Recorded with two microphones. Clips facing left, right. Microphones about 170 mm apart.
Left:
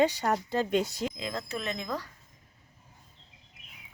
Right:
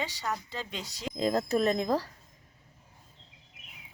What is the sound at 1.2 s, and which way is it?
Speech, 40° right (ahead or behind).